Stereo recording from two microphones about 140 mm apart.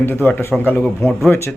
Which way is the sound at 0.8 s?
Centre (ahead or behind).